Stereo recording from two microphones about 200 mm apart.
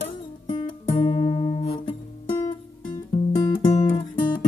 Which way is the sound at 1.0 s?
30° left (ahead or behind).